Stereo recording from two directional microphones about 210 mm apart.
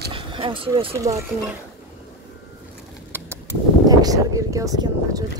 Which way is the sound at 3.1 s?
10° right (ahead or behind).